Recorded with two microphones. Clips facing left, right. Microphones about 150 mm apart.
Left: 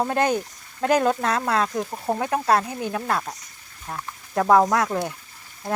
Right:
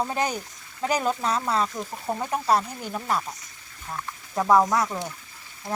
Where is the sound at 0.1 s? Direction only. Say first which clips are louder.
Left 5 dB; 55° left (ahead or behind).